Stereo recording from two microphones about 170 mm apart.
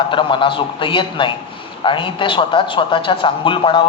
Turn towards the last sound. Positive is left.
turn(degrees=30)  # may be behind; listen again after turning